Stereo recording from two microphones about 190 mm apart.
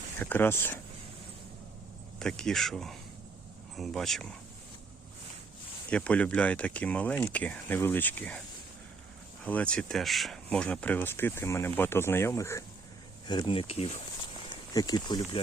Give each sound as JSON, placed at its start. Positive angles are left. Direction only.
{"t": 0.2, "sound": "speech", "side_deg": 10}
{"t": 2.1, "sound": "speech", "side_deg": 5}
{"t": 5.9, "sound": "speech", "side_deg": 5}
{"t": 9.4, "sound": "speech", "side_deg": 10}
{"t": 13.2, "sound": "speech", "side_deg": 25}
{"t": 14.7, "sound": "speech", "side_deg": 20}